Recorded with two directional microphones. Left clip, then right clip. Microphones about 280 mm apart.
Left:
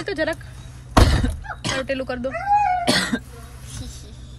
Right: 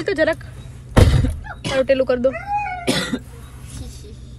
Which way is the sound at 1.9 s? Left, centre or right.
Right.